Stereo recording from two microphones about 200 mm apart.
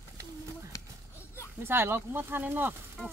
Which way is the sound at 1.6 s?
10° right (ahead or behind).